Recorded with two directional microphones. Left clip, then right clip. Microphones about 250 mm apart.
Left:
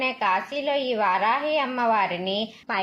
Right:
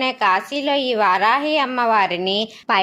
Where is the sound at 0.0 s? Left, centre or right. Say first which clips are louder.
Right 6 dB; right.